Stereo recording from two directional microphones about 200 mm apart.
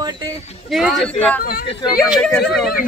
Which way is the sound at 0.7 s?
Centre (ahead or behind).